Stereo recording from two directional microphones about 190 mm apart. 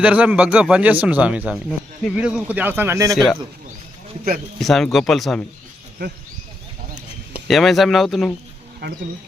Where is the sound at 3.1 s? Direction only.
Centre (ahead or behind).